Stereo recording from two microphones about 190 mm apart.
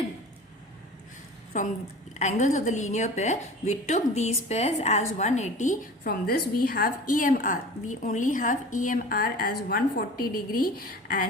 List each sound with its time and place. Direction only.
1.5 s a woman's voice: 40° left (ahead or behind)